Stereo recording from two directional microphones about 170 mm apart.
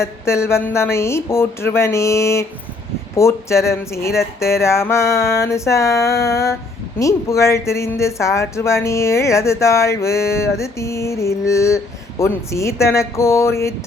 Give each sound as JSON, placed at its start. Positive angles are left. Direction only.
{"t": 0.0, "sound": "speech", "side_deg": 15}